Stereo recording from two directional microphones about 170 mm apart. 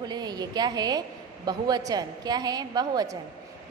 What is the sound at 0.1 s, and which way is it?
A woman's voice, 25° right (ahead or behind).